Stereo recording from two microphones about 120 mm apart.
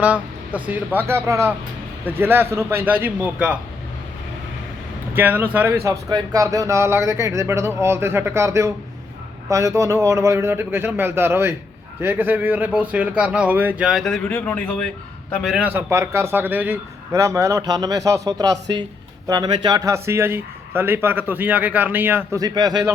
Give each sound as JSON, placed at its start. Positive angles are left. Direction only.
{"t": 0.0, "sound": "speech", "side_deg": -10}
{"t": 5.1, "sound": "speech", "side_deg": -15}
{"t": 5.8, "sound": "speech", "side_deg": -25}
{"t": 15.4, "sound": "a man's voice", "side_deg": -5}
{"t": 15.7, "sound": "speech", "side_deg": -20}
{"t": 19.8, "sound": "speech", "side_deg": -25}
{"t": 22.4, "sound": "speech", "side_deg": -35}